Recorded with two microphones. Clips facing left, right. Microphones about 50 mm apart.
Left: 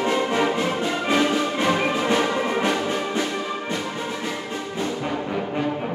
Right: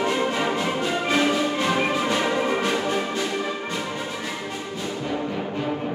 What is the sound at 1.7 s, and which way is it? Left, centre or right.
Music, centre.